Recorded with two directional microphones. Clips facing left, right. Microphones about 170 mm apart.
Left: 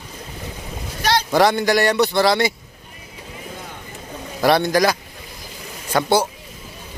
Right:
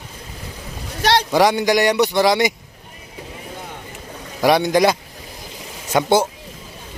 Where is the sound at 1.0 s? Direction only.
70° right (ahead or behind).